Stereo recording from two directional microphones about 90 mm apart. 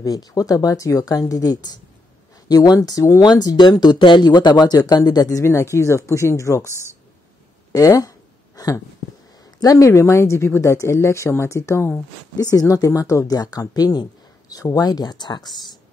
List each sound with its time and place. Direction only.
0.0 s speech: 45° left (ahead or behind)
5.4 s speech: 30° left (ahead or behind)
7.7 s a sound: 40° left (ahead or behind)
9.4 s speech: 45° left (ahead or behind); by 12.0 s 30° left (ahead or behind)
12.4 s speech: 40° left (ahead or behind)